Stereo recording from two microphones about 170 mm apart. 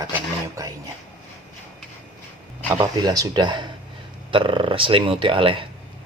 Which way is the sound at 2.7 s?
20° right (ahead or behind).